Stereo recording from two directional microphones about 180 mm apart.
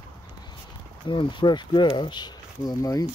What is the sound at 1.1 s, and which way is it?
Speech, 25° left (ahead or behind).